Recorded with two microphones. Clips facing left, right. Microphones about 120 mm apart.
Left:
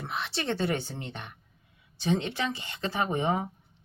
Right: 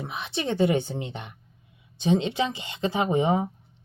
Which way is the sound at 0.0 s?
15° right (ahead or behind).